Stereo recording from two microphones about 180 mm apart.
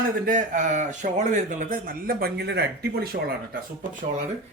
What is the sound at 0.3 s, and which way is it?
A man's voice, 45° right (ahead or behind).